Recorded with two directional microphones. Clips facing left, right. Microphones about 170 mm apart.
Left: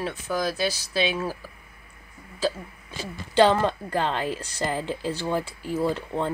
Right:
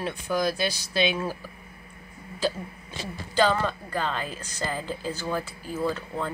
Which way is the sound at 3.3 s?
25° left (ahead or behind).